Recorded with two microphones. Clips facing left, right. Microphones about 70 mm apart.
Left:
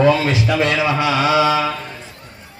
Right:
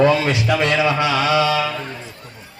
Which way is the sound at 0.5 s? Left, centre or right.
Left.